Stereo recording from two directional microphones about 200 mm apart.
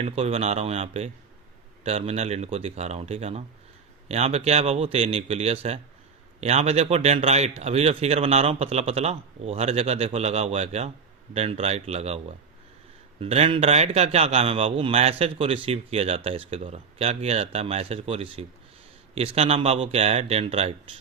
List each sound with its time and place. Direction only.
0.0 s a man's voice: 30° right (ahead or behind)